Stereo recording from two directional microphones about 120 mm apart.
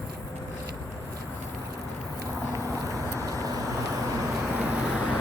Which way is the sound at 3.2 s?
30° right (ahead or behind).